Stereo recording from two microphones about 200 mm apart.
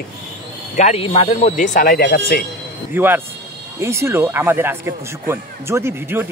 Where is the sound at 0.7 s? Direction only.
30° left (ahead or behind); by 2.4 s 50° left (ahead or behind).